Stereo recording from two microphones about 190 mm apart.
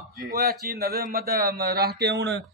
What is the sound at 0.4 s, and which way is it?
Speech, 55° right (ahead or behind).